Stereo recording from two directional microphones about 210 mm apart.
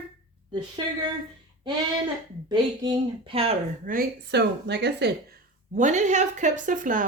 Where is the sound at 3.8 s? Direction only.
45° right (ahead or behind).